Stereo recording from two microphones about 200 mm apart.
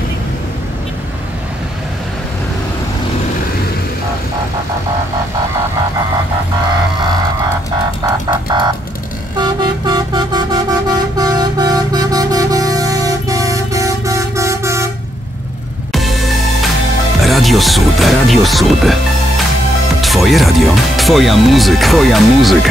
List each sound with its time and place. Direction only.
8.0 s music: 20° right (ahead or behind)
9.4 s vehicle: 20° right (ahead or behind)
11.1 s music: 20° right (ahead or behind)
15.9 s music: centre (ahead or behind)
20.0 s music: centre (ahead or behind)